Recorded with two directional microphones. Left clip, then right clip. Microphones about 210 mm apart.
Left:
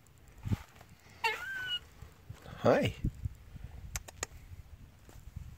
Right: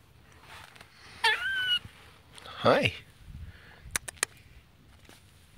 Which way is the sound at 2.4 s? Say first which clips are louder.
Right 4 dB; 15° left (ahead or behind).